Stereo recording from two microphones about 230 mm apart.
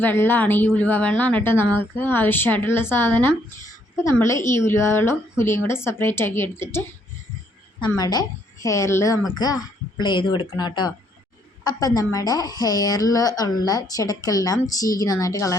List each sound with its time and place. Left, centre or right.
0.0 s a woman's voice: centre